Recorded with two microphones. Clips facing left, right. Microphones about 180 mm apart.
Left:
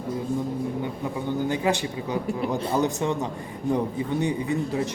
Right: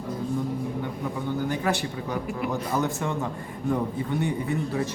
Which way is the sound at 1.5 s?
20° left (ahead or behind).